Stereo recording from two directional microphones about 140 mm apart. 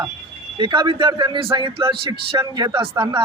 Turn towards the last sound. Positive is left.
turn(degrees=-20)  # may be behind; listen again after turning